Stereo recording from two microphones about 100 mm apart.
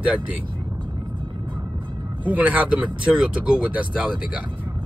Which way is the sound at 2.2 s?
15° right (ahead or behind).